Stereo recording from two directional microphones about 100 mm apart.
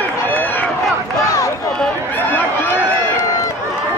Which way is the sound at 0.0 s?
20° left (ahead or behind).